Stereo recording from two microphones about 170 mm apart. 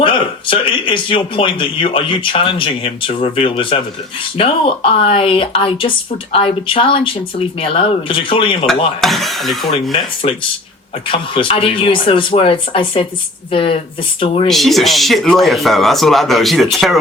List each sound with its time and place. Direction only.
0.0 s speech: 30° left (ahead or behind)
9.0 s speech: centre (ahead or behind)
10.2 s speech: 40° left (ahead or behind)
14.4 s speech: centre (ahead or behind)